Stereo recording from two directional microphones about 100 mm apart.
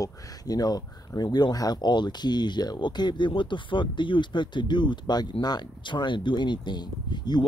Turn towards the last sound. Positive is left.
turn(degrees=45)  # may be behind; listen again after turning